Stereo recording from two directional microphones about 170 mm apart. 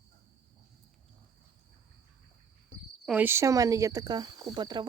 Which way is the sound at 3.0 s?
10° right (ahead or behind).